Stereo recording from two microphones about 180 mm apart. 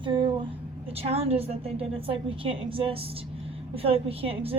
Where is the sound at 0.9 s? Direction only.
35° right (ahead or behind).